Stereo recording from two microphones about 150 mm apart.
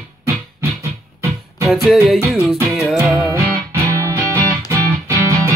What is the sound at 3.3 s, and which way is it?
Music, 15° right (ahead or behind).